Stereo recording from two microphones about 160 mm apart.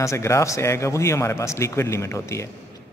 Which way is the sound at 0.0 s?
20° left (ahead or behind).